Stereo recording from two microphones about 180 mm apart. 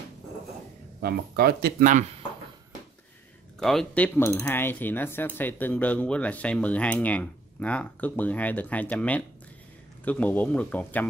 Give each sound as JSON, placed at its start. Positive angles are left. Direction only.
{"t": 1.0, "sound": "speech", "side_deg": -60}
{"t": 3.5, "sound": "speech", "side_deg": 5}